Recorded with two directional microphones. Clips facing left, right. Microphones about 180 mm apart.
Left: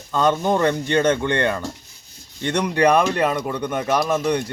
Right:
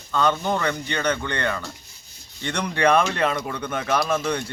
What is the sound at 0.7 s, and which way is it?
Speech, 45° left (ahead or behind).